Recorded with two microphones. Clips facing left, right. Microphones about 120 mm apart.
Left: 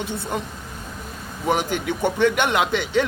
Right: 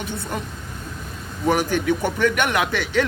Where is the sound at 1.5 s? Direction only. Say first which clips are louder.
Right 3 dB; 20° left (ahead or behind).